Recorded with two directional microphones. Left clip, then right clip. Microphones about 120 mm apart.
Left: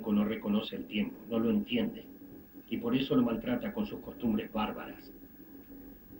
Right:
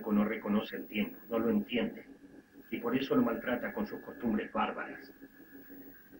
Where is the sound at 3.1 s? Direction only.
30° right (ahead or behind).